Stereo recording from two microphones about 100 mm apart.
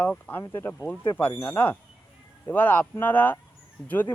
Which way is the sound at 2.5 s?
20° left (ahead or behind).